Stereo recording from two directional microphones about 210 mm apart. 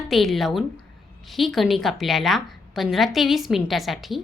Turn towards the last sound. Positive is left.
turn(degrees=0)  # may be behind; listen again after turning